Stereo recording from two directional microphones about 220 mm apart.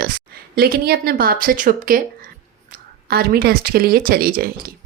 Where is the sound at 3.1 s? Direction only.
45° right (ahead or behind).